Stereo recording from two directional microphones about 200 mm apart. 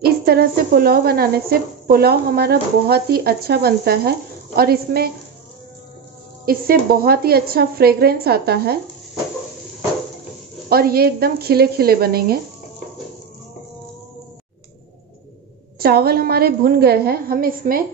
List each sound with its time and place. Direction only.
0.0 s speech: 50° right (ahead or behind)
6.4 s speech: 45° right (ahead or behind)
10.7 s speech: 50° right (ahead or behind)
15.8 s speech: 50° right (ahead or behind)